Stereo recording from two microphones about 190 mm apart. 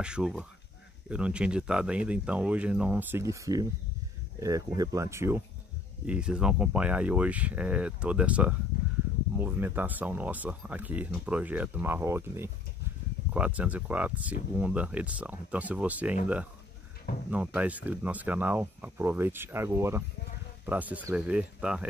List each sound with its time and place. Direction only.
0.0 s speech: 5° right (ahead or behind)
17.3 s speech: 10° right (ahead or behind)